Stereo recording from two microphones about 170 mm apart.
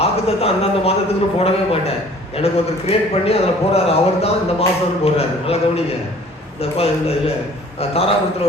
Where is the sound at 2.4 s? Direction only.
35° left (ahead or behind).